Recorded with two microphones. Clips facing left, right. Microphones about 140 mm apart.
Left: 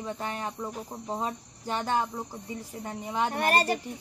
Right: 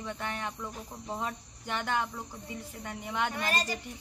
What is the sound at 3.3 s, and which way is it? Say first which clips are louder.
Speech: left 7 dB; 60° left (ahead or behind).